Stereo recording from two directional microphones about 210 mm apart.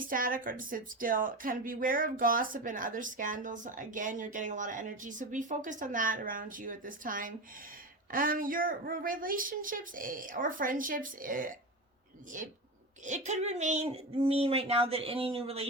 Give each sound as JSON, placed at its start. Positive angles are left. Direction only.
{"t": 0.0, "sound": "a woman's voice", "side_deg": -40}